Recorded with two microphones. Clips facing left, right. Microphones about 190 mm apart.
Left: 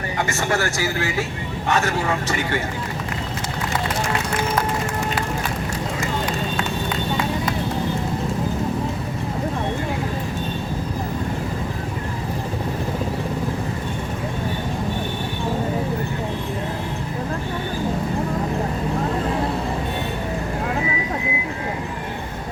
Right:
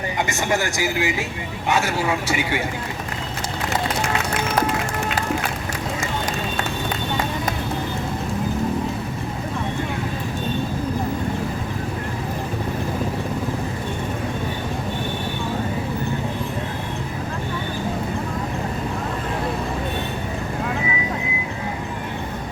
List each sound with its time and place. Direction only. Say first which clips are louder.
0.3 s speech: left 1 dB; 15° right (ahead or behind)